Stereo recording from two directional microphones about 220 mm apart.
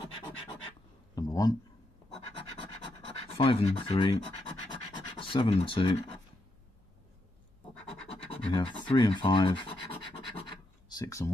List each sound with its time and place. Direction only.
1.1 s a sound: 15° left (ahead or behind)
2.3 s scratch: 20° left (ahead or behind)
5.2 s speech: 25° left (ahead or behind)
8.3 s speech: 25° left (ahead or behind)
9.9 s scratch: 25° left (ahead or behind)